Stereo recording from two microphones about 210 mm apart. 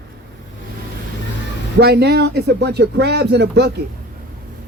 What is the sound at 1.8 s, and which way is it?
A man's voice, 50° right (ahead or behind).